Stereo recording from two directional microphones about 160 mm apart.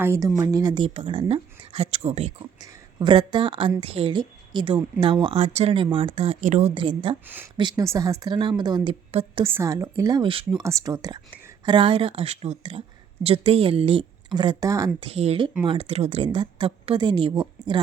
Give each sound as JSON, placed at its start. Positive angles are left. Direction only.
{"t": 0.0, "sound": "a woman's voice", "side_deg": -15}
{"t": 2.6, "sound": "a woman's voice", "side_deg": -30}
{"t": 7.3, "sound": "speech", "side_deg": -10}
{"t": 7.5, "sound": "a woman's voice", "side_deg": -30}
{"t": 9.4, "sound": "a woman's voice", "side_deg": -15}
{"t": 10.6, "sound": "a woman's voice", "side_deg": -20}
{"t": 15.0, "sound": "a woman's voice", "side_deg": -40}